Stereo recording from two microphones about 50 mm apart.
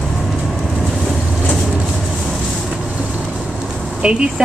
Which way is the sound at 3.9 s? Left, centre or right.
Centre.